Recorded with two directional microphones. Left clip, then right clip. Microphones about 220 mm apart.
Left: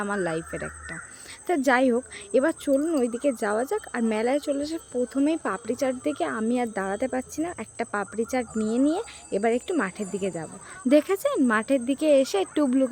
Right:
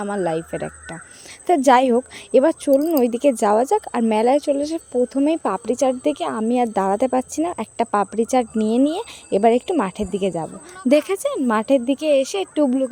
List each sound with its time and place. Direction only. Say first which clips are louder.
0.0 s speech: right 5 dB; 20° right (ahead or behind)